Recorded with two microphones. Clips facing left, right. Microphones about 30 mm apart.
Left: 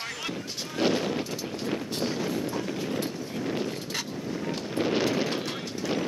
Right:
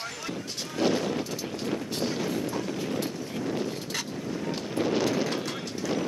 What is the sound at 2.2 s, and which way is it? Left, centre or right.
Train, centre.